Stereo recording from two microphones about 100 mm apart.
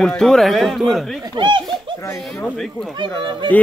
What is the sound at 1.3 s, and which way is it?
Speech, 55° right (ahead or behind).